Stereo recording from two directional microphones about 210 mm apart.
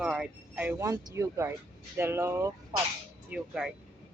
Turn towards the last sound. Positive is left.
turn(degrees=-5)  # may be behind; listen again after turning